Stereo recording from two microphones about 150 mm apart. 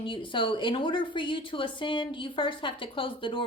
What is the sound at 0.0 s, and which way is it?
A woman's voice, 35° left (ahead or behind).